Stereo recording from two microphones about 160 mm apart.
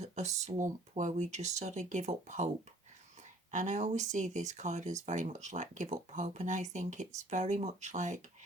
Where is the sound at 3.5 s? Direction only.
50° right (ahead or behind).